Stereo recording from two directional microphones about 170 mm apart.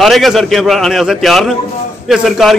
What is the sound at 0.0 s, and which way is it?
A man's voice, centre (ahead or behind).